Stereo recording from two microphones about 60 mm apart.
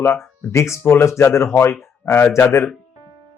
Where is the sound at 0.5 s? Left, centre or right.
Left.